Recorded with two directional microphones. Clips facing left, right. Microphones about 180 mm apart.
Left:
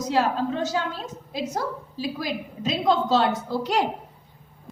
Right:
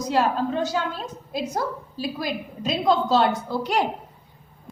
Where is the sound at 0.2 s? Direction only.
50° right (ahead or behind).